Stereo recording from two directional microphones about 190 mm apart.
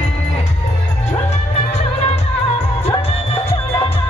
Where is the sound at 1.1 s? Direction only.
35° left (ahead or behind).